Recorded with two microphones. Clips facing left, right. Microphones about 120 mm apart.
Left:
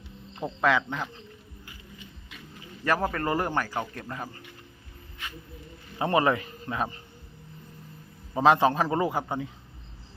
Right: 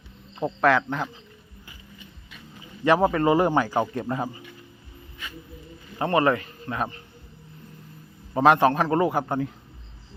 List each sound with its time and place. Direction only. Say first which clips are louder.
0.4 s speech: right 6 dB; 35° right (ahead or behind)
0.8 s a man's voice: right 4 dB; 5° right (ahead or behind)
2.8 s a man's voice: right 7 dB; 20° right (ahead or behind)
6.0 s a man's voice: right 2 dB; 15° left (ahead or behind)
8.3 s a man's voice: right 3 dB; centre (ahead or behind)